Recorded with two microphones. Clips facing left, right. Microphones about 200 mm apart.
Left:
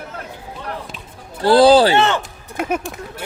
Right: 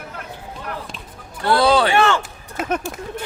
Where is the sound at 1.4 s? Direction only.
30° left (ahead or behind).